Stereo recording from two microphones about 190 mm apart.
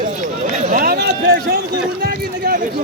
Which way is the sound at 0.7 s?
50° right (ahead or behind).